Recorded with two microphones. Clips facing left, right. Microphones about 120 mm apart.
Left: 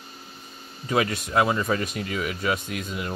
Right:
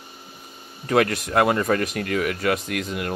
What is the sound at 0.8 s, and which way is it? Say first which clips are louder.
Speech: right 4 dB; 60° right (ahead or behind).